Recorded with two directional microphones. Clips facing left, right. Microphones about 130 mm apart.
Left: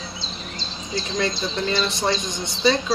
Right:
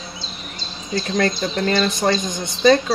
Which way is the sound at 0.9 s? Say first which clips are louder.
Right 5 dB; 50° right (ahead or behind).